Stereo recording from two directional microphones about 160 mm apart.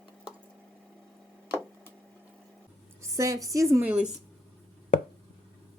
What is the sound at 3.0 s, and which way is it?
A woman's voice, 20° right (ahead or behind).